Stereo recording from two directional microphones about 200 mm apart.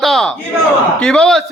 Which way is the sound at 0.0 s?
Centre (ahead or behind).